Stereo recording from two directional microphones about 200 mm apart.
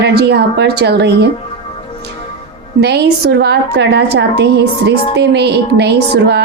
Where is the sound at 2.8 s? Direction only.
60° right (ahead or behind).